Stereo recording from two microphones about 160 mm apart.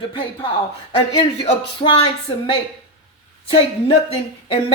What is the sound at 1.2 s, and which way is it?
Speech, 35° left (ahead or behind).